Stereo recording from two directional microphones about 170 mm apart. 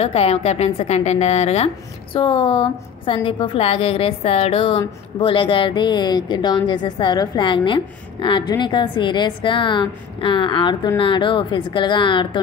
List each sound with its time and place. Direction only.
0.0 s a woman's voice: 35° left (ahead or behind)